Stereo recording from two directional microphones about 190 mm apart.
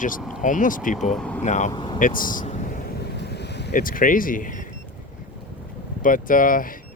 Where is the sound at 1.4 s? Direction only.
40° left (ahead or behind).